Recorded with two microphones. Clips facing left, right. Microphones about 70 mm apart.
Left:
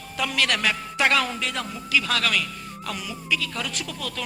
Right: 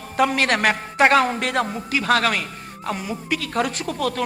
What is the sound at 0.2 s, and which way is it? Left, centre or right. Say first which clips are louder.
A man's voice: right 6 dB; right.